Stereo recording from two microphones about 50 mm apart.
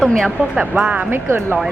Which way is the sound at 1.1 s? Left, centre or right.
Right.